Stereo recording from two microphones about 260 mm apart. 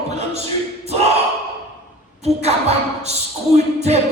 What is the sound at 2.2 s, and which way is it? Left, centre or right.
Speech, right.